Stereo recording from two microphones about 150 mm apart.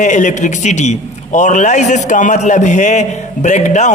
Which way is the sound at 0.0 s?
55° left (ahead or behind).